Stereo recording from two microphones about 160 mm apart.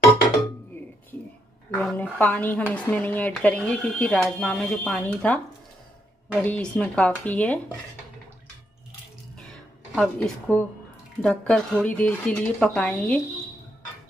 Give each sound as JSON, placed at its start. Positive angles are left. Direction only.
{"t": 1.7, "sound": "speech", "side_deg": 10}
{"t": 6.4, "sound": "speech", "side_deg": 5}
{"t": 9.5, "sound": "a sound", "side_deg": 5}
{"t": 11.2, "sound": "speech", "side_deg": 5}